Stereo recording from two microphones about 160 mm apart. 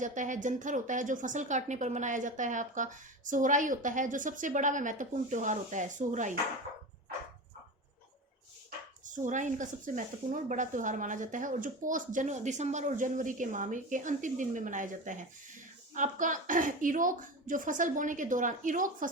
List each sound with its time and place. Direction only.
0.0 s a woman's voice: 50° right (ahead or behind)
9.0 s a woman's voice: 50° right (ahead or behind)